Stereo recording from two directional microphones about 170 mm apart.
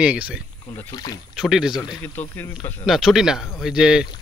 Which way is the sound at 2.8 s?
Centre (ahead or behind).